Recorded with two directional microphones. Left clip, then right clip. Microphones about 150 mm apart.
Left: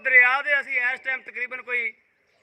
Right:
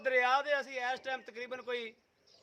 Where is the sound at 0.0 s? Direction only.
25° right (ahead or behind).